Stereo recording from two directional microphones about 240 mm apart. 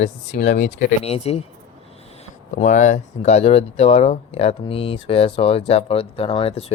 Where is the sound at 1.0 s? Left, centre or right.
Left.